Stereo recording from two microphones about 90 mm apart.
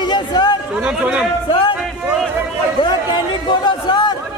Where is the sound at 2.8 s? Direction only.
60° left (ahead or behind).